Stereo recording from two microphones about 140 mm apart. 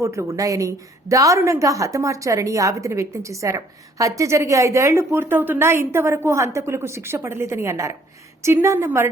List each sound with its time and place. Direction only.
0.0 s a woman's voice: 20° right (ahead or behind)